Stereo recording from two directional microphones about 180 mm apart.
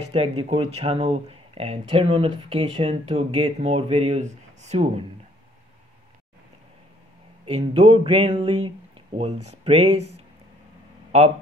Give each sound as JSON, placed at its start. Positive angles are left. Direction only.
{"t": 0.1, "sound": "speech", "side_deg": -35}
{"t": 7.4, "sound": "speech", "side_deg": -30}